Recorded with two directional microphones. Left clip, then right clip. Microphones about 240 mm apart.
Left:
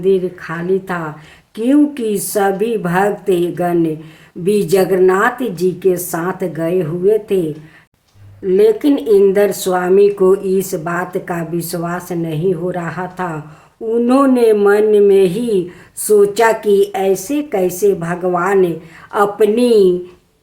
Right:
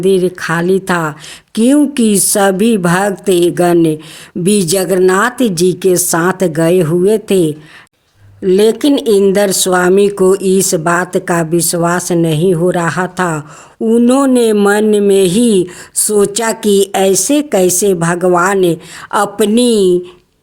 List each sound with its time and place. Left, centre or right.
0.0 s speech: right
8.4 s speech: right